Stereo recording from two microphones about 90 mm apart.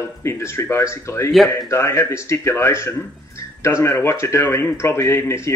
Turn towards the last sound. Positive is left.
turn(degrees=30)  # may be behind; listen again after turning